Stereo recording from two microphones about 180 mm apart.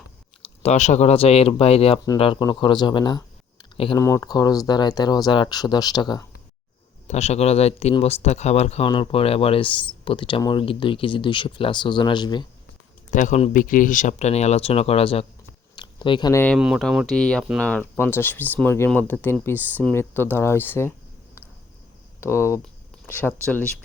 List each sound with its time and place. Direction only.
0.4 s speech: 35° left (ahead or behind)
7.1 s speech: 35° left (ahead or behind)
13.1 s speech: 45° left (ahead or behind)
15.7 s a sound: 25° left (ahead or behind)
16.3 s speech: 10° left (ahead or behind)
16.6 s speech: 5° right (ahead or behind); by 20.9 s 10° left (ahead or behind)
22.2 s speech: 15° left (ahead or behind)